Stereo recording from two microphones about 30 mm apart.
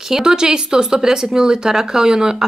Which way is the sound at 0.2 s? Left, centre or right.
Right.